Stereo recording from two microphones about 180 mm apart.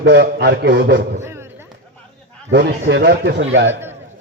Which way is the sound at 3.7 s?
10° right (ahead or behind).